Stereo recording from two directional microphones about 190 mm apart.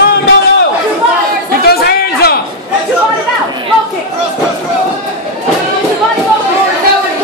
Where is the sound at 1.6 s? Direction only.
55° left (ahead or behind).